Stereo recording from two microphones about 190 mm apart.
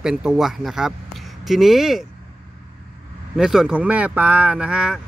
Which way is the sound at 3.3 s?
Centre (ahead or behind).